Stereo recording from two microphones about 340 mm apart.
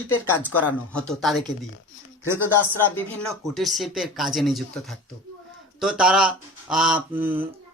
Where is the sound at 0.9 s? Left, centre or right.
Centre.